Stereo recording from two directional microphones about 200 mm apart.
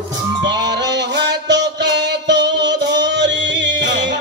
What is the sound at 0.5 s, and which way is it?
Music, 60° right (ahead or behind).